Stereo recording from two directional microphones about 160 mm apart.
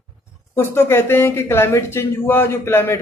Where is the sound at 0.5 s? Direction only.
15° left (ahead or behind).